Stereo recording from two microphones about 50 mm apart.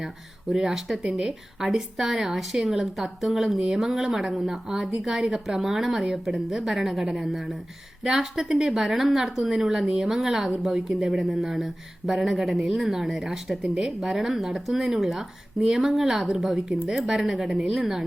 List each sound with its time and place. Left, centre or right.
0.5 s speech: centre